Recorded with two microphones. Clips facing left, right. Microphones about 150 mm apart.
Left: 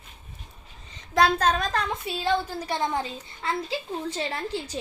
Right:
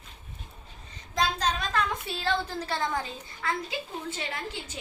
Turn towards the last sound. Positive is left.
turn(degrees=35)  # may be behind; listen again after turning